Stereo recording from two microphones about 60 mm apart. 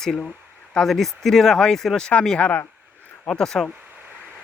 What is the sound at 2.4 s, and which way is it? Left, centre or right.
Speech, left.